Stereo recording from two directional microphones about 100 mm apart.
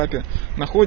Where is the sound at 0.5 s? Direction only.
30° left (ahead or behind).